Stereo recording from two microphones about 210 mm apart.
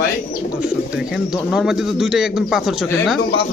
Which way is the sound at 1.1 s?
Centre (ahead or behind).